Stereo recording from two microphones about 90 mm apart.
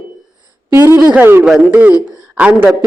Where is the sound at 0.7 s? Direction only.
35° right (ahead or behind).